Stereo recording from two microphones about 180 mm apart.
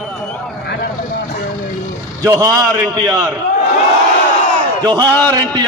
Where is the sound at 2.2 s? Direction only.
15° right (ahead or behind).